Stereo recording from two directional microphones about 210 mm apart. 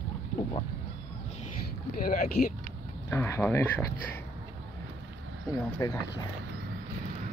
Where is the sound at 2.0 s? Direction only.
40° left (ahead or behind).